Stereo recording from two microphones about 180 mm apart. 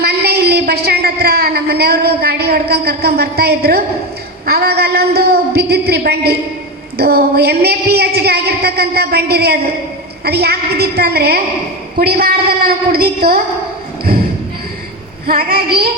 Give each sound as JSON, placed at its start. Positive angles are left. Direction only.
{"t": 0.0, "sound": "a sound", "side_deg": -60}
{"t": 1.2, "sound": "a woman's voice", "side_deg": -60}
{"t": 15.3, "sound": "a woman's voice", "side_deg": -55}